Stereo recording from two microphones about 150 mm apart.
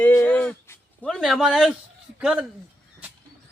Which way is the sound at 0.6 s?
15° left (ahead or behind).